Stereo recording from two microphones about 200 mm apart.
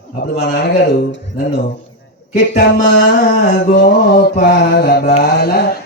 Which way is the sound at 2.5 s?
60° left (ahead or behind).